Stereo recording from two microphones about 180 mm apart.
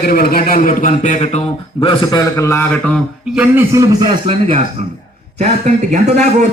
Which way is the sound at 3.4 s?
15° right (ahead or behind).